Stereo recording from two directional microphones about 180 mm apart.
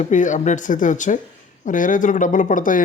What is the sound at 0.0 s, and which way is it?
Speech, 45° left (ahead or behind).